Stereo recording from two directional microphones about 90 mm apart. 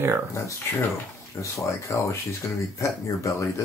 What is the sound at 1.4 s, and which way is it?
Speech, 35° left (ahead or behind).